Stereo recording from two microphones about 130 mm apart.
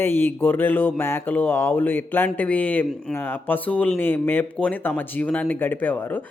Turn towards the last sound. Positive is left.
turn(degrees=15)  # may be behind; listen again after turning